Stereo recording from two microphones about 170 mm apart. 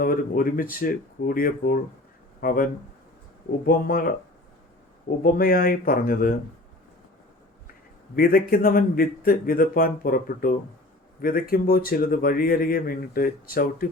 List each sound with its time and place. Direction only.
0.0 s speech: 55° left (ahead or behind)
3.7 s speech: 60° left (ahead or behind)
5.2 s speech: 55° left (ahead or behind)
8.1 s speech: 60° left (ahead or behind)